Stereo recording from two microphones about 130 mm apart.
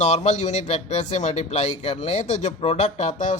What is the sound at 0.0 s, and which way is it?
A man's voice, 60° left (ahead or behind).